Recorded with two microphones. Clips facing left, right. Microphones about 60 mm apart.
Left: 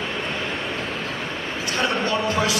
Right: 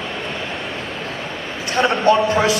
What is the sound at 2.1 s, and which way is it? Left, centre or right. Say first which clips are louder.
Speech: right 7 dB; right.